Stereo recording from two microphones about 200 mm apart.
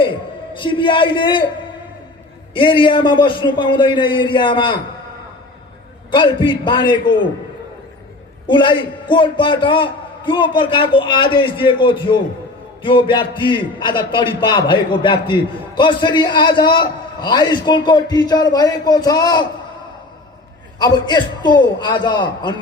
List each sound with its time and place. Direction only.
0.5 s speech: 25° left (ahead or behind)
2.5 s speech: 25° left (ahead or behind)
6.1 s speech: 25° left (ahead or behind)
8.4 s speech: 25° left (ahead or behind)
20.7 s speech: 20° left (ahead or behind)